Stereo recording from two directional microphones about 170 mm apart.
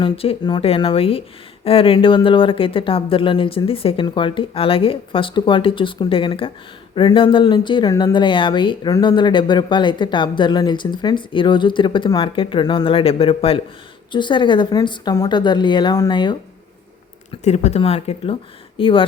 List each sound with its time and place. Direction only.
0.0 s speech: 30° left (ahead or behind)
17.4 s speech: 40° left (ahead or behind)